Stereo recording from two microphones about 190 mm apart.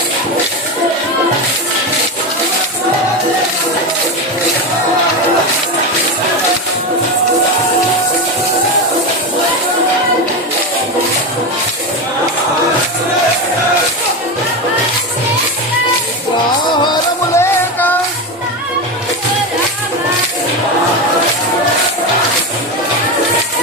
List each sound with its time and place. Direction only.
17.3 s music: 10° left (ahead or behind)